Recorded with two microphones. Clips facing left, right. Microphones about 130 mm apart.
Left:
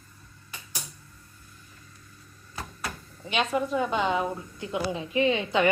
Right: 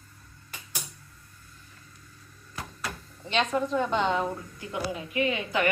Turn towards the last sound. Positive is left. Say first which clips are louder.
# left 3 dB
turn(degrees=25)  # may be behind; listen again after turning